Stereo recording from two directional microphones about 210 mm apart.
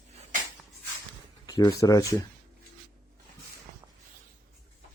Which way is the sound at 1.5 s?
15° left (ahead or behind).